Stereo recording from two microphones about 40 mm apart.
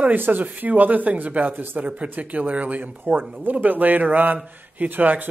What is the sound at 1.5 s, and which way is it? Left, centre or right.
Speech, right.